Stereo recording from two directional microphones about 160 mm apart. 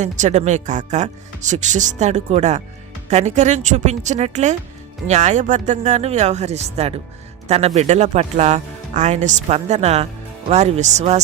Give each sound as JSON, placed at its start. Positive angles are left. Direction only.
{"t": 0.0, "sound": "speech", "side_deg": -45}